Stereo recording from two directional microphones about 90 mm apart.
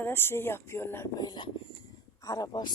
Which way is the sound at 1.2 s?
50° left (ahead or behind).